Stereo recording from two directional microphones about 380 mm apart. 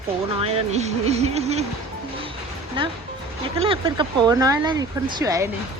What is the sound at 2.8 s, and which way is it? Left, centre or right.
Speech, centre.